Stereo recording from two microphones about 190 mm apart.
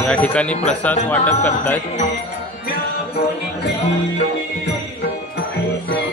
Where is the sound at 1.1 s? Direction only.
35° left (ahead or behind).